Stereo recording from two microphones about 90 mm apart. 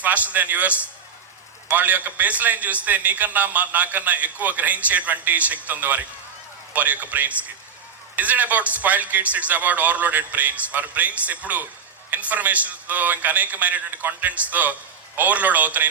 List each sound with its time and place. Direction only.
0.0 s a man's voice: 15° right (ahead or behind)